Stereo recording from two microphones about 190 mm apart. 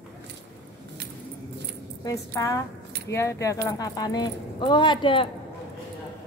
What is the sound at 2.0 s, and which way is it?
A woman's voice, 15° left (ahead or behind).